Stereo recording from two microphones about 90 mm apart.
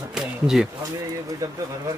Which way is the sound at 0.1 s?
5° right (ahead or behind).